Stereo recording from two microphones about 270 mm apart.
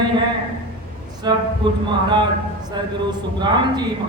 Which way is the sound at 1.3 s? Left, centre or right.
Centre.